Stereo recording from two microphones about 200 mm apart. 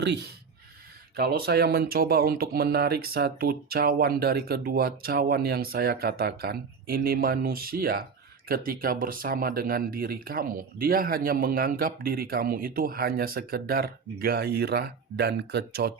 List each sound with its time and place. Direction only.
0.0 s speech: 60° right (ahead or behind)